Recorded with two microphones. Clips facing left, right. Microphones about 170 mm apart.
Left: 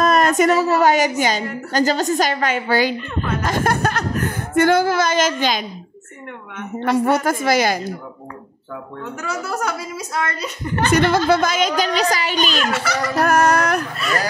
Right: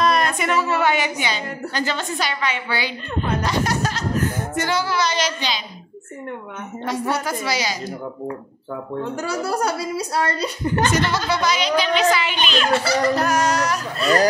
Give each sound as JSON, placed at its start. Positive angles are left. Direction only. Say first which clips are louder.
{"t": 0.0, "sound": "a woman's voice", "louder": "left 5 dB", "side_deg": 45}
{"t": 3.4, "sound": "a sound", "louder": "left 3 dB", "side_deg": 50}
{"t": 6.8, "sound": "a woman's voice", "louder": "left 7 dB", "side_deg": 55}
{"t": 9.0, "sound": "a woman's voice", "louder": "right 2 dB", "side_deg": -30}
{"t": 10.9, "sound": "a woman's voice", "louder": "left 6 dB", "side_deg": 55}
{"t": 12.5, "sound": "a woman's voice", "louder": "right 2 dB", "side_deg": -30}
{"t": 13.2, "sound": "music", "louder": "left 4 dB", "side_deg": 55}
{"t": 13.9, "sound": "a woman's voice", "louder": "right 5 dB", "side_deg": -30}